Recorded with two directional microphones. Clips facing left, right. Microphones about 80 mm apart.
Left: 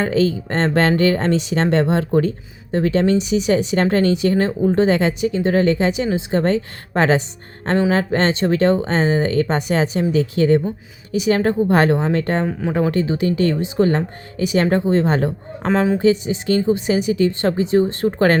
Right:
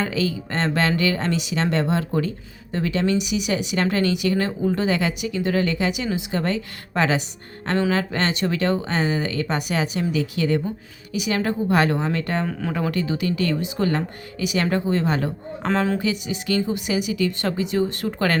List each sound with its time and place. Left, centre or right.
0.0 s speech: left